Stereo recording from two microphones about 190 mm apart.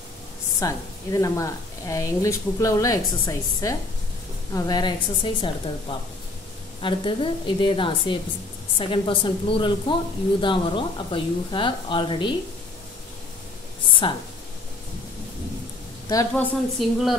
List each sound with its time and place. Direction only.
0.6 s speech: 15° left (ahead or behind)
14.0 s speech: 25° left (ahead or behind)
16.1 s speech: 15° left (ahead or behind)
16.7 s a woman's voice: centre (ahead or behind)